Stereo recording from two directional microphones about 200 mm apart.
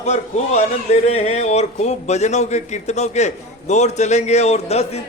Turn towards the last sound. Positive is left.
turn(degrees=30)  # may be behind; listen again after turning